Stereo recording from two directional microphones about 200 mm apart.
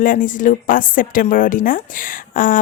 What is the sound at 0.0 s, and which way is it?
A woman's voice, 40° left (ahead or behind).